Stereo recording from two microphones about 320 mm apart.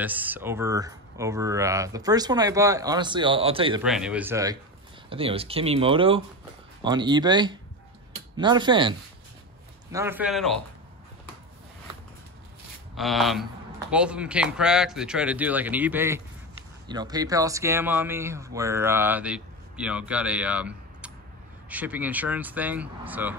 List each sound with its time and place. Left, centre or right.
0.0 s speech: centre
3.8 s a man's voice: centre
12.9 s a man's voice: centre